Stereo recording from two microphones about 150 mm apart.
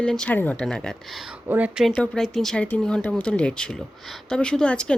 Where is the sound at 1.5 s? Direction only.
10° right (ahead or behind).